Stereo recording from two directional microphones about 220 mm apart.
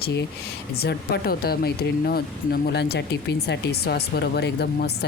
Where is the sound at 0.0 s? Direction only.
50° left (ahead or behind).